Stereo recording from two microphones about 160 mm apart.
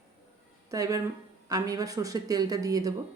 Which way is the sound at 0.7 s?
20° right (ahead or behind).